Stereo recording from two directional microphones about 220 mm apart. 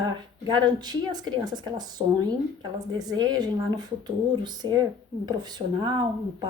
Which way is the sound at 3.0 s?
20° right (ahead or behind).